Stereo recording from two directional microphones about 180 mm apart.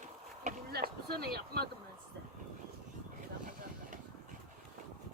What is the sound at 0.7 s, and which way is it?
Speech, 60° right (ahead or behind).